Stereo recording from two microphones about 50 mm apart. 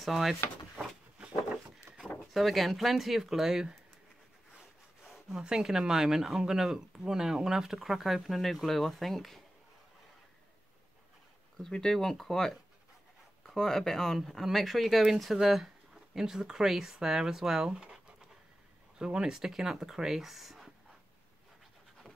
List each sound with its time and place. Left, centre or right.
0.0 s speech: centre
2.1 s speech: centre
5.3 s speech: centre
11.5 s speech: centre